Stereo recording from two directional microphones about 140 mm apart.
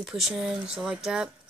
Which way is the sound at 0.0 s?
Centre (ahead or behind).